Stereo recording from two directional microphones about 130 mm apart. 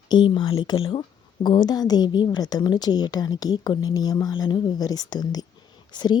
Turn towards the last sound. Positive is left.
turn(degrees=35)  # may be behind; listen again after turning